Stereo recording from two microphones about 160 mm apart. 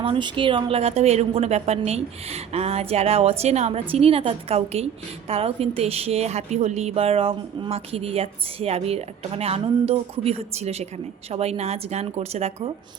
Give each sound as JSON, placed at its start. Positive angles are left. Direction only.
{"t": 0.0, "sound": "a woman's voice", "side_deg": -30}